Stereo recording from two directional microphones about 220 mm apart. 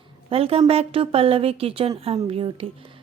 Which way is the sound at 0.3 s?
25° right (ahead or behind).